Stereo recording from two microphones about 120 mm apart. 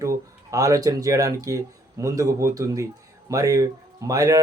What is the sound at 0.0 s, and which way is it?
Speech, 25° right (ahead or behind).